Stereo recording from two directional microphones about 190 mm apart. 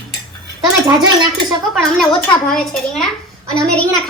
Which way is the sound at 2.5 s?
5° left (ahead or behind).